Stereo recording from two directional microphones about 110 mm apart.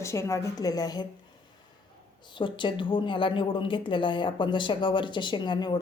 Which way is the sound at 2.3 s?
45° left (ahead or behind).